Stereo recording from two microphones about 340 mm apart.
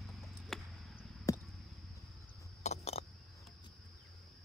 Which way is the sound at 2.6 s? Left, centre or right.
Centre.